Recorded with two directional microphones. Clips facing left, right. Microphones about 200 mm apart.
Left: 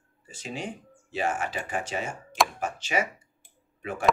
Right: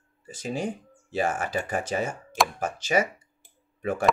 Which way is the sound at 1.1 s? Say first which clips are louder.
Right 3 dB; 45° right (ahead or behind).